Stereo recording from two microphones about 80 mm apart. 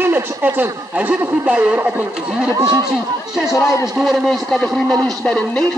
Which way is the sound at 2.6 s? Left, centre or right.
Right.